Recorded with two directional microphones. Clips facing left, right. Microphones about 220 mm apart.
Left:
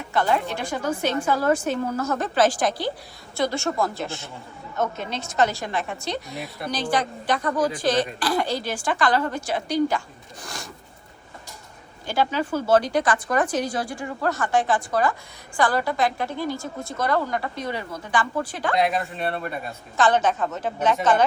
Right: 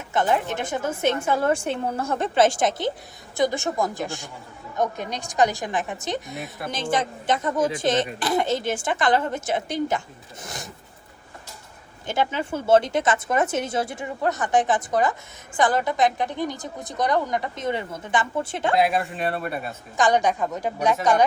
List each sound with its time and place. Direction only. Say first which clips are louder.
0.1 s a woman's voice: right 1 dB; 20° right (ahead or behind)
6.3 s speech: even; centre (ahead or behind)
6.7 s speech: even; 25° right (ahead or behind)
12.0 s speech: left 1 dB; 20° right (ahead or behind)
18.8 s a woman's voice: even; 5° right (ahead or behind)